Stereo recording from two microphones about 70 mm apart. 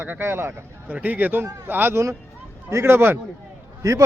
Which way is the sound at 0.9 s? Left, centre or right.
Right.